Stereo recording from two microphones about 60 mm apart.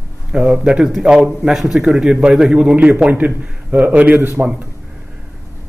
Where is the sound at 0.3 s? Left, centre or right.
Centre; by 4.5 s right.